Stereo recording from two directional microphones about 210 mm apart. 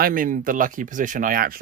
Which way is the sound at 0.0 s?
40° right (ahead or behind).